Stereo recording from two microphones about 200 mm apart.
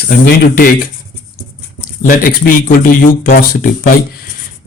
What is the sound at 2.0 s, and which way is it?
Speech, 45° left (ahead or behind).